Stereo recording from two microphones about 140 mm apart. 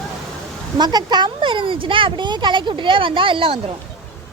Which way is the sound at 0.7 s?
30° right (ahead or behind).